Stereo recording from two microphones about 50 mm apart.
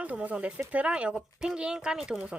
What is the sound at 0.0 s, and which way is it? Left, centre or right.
A woman's voice, right.